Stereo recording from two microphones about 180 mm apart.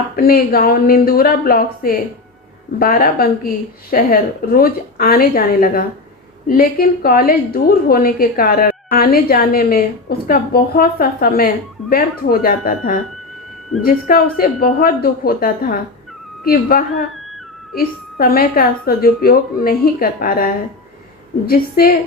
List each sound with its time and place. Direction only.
0.2 s a woman's voice: 55° left (ahead or behind)